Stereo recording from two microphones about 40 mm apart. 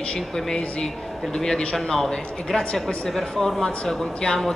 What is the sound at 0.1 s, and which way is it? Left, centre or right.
A man's voice, left.